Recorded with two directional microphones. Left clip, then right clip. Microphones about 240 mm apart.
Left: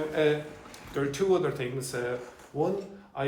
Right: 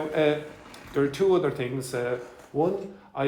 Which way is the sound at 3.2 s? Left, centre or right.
Right.